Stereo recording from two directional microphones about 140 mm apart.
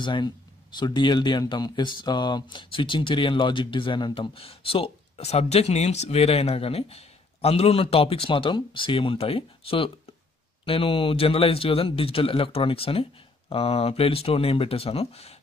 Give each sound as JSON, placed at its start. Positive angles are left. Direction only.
{"t": 0.0, "sound": "speech", "side_deg": 35}